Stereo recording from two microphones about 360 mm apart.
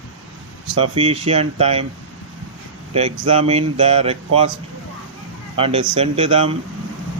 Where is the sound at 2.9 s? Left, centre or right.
Centre.